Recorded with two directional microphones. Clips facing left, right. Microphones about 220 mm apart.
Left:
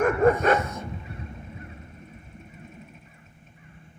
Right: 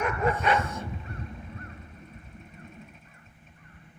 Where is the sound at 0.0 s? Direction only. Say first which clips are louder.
Left 8 dB; 50° left (ahead or behind).